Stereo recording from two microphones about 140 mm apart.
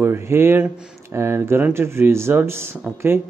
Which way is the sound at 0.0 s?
15° right (ahead or behind).